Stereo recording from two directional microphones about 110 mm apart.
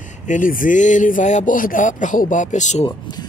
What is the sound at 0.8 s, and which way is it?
Music, 90° left.